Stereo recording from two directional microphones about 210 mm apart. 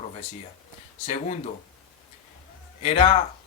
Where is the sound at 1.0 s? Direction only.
35° left (ahead or behind).